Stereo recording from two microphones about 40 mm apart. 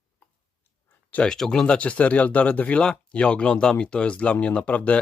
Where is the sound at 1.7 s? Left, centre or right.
Left.